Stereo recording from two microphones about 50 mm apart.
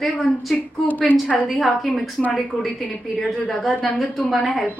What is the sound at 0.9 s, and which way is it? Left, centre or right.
Speech, left.